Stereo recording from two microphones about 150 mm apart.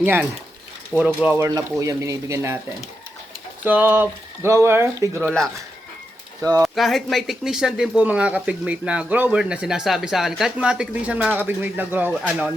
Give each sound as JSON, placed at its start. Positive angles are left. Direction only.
{"t": 0.0, "sound": "speech", "side_deg": -15}
{"t": 3.6, "sound": "speech", "side_deg": -10}
{"t": 6.4, "sound": "speech", "side_deg": -25}
{"t": 6.7, "sound": "speech", "side_deg": 0}